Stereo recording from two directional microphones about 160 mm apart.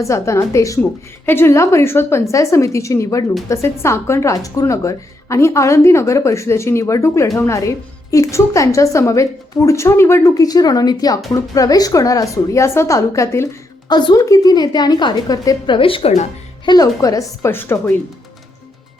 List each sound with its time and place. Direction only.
0.0 s a woman's voice: 20° left (ahead or behind); by 16.2 s 35° left (ahead or behind)
16.6 s a woman's voice: 25° left (ahead or behind)